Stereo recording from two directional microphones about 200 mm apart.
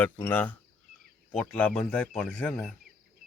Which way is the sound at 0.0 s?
10° left (ahead or behind).